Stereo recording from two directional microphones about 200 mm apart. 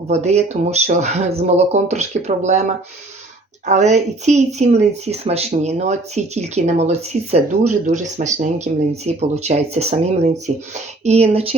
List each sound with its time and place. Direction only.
0.3 s speech: 35° right (ahead or behind)